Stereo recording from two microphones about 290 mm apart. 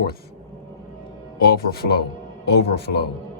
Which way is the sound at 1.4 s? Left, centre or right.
Left.